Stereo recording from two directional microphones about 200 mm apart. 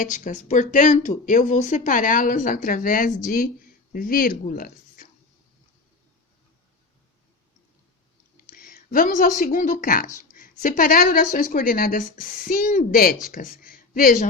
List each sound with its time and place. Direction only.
0.0 s speech: 40° left (ahead or behind)
8.4 s speech: 45° left (ahead or behind)
10.2 s a sound: 40° left (ahead or behind)
10.6 s speech: 45° left (ahead or behind)